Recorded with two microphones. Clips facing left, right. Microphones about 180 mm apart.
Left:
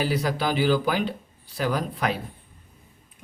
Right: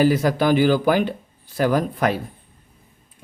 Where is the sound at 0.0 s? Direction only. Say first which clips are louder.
Right 8 dB; 50° right (ahead or behind).